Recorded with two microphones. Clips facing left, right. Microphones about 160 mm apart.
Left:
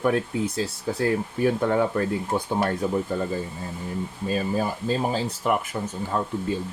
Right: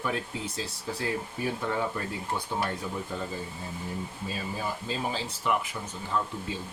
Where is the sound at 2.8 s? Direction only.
50° left (ahead or behind).